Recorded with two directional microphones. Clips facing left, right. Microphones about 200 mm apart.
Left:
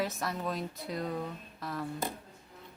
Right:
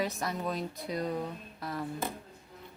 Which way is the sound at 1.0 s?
15° right (ahead or behind).